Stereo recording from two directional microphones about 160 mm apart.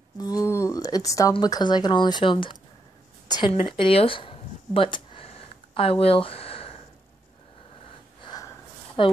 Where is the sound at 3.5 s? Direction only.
35° left (ahead or behind).